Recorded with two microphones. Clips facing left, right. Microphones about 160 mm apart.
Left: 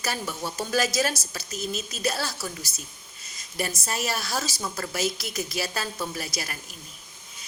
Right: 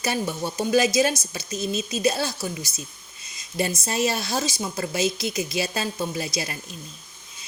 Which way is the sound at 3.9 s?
25° right (ahead or behind).